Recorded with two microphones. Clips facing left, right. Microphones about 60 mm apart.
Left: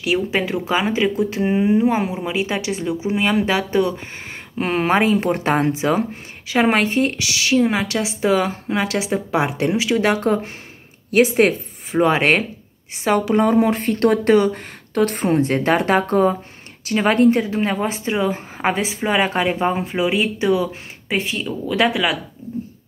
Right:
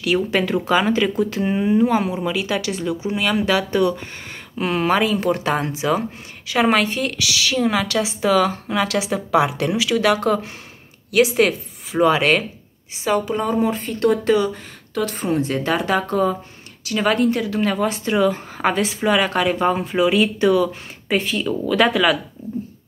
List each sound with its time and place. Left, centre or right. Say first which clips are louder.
0.0 s speech: right 1 dB; centre